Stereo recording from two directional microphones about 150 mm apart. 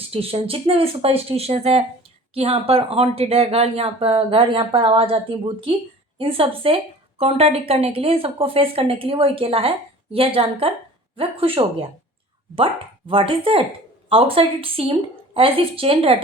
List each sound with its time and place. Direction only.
0.1 s a woman's voice: 40° right (ahead or behind)
13.1 s a woman's voice: 35° right (ahead or behind)